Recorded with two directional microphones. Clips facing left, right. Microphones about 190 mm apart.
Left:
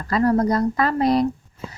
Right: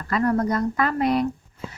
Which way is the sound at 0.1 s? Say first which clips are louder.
Left 3 dB; 35° left (ahead or behind).